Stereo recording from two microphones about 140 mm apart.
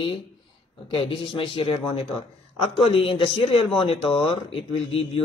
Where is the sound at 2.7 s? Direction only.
40° left (ahead or behind).